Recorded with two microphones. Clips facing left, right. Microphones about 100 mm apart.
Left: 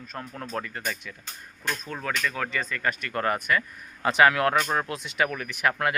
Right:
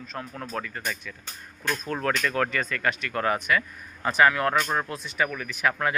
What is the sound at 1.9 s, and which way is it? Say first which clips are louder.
Speech: right 5 dB; centre (ahead or behind).